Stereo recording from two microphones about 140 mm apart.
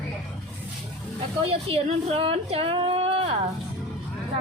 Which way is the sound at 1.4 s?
45° right (ahead or behind).